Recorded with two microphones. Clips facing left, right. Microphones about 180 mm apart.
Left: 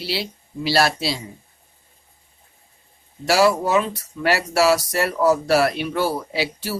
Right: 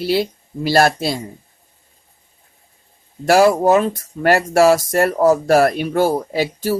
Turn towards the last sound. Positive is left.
turn(degrees=-45)  # may be behind; listen again after turning